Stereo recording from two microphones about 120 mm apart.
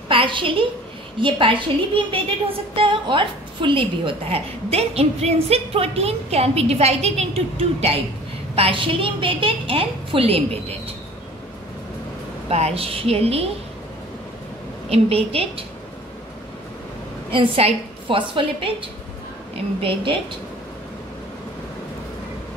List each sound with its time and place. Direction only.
0.1 s a sound: 45° right (ahead or behind)
1.2 s a woman's voice: 45° right (ahead or behind)
12.4 s a woman's voice: 60° right (ahead or behind)
14.9 s a woman's voice: 55° right (ahead or behind)
17.3 s a woman's voice: 45° right (ahead or behind)